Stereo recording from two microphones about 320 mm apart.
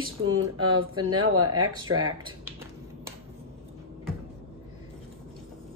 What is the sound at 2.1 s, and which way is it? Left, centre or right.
Speech, centre.